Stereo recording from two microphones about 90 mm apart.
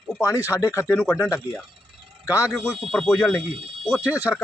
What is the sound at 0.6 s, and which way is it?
Speech, 35° left (ahead or behind).